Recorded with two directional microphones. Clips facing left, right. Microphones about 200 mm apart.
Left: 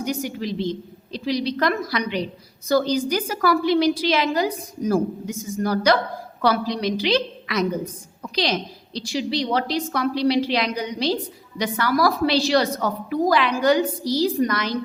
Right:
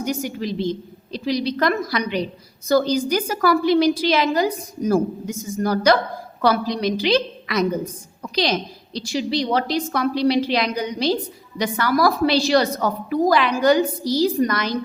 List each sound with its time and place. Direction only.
0.0 s a woman's voice: 45° right (ahead or behind)